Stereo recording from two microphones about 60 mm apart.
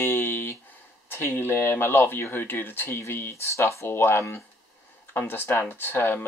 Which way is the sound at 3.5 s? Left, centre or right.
Left.